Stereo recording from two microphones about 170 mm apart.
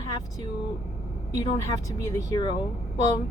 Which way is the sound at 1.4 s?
25° left (ahead or behind).